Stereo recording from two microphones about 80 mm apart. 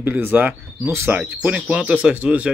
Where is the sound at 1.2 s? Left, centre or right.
Centre.